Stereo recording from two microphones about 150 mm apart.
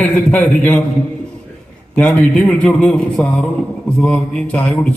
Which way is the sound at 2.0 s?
5° left (ahead or behind).